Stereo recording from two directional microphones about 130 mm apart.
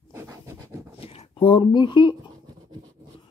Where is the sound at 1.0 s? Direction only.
45° left (ahead or behind).